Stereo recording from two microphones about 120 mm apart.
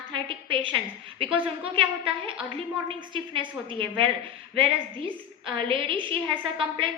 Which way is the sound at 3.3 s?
45° right (ahead or behind).